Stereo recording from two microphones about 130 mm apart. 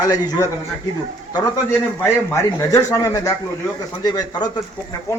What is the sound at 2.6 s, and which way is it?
A man's voice, 25° left (ahead or behind).